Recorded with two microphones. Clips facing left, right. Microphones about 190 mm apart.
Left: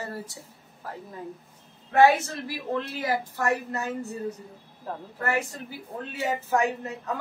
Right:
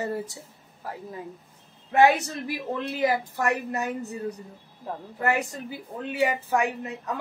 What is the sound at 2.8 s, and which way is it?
Speech, 15° right (ahead or behind).